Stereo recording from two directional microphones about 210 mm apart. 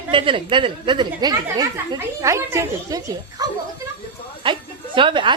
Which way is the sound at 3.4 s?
20° right (ahead or behind).